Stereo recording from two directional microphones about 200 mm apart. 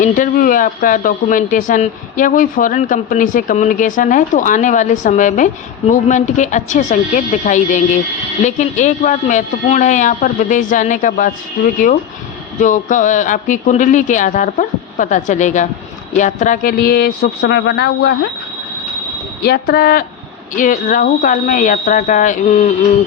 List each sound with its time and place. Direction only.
0.0 s speech: 40° left (ahead or behind)
12.5 s speech: 40° left (ahead or behind); by 18.3 s 55° left (ahead or behind)
19.4 s speech: 50° left (ahead or behind)